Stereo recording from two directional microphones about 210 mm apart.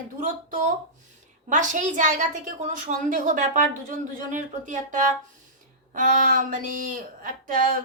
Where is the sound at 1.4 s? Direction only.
35° right (ahead or behind).